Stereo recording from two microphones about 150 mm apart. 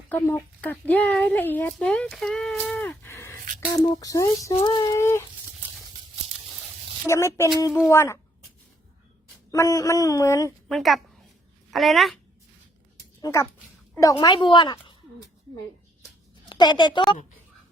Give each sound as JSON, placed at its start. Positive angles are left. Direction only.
{"t": 0.1, "sound": "speech", "side_deg": 10}
{"t": 7.1, "sound": "speech", "side_deg": 20}
{"t": 9.5, "sound": "speech", "side_deg": 20}
{"t": 10.7, "sound": "speech", "side_deg": 0}
{"t": 13.2, "sound": "a woman's voice", "side_deg": 20}
{"t": 16.5, "sound": "a woman's voice", "side_deg": 30}